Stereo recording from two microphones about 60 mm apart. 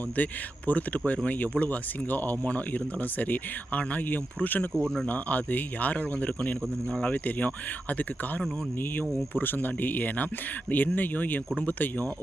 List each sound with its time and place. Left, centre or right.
0.2 s speech: left
4.7 s speech: centre
5.0 s speech: left